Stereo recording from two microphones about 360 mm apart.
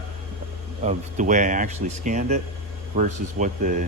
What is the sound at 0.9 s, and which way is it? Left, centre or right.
Speech, centre.